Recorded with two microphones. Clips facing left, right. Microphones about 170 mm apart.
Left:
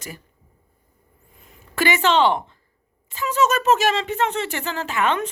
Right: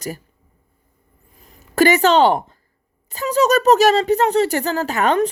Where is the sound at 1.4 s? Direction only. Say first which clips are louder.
Right 8 dB; 40° right (ahead or behind).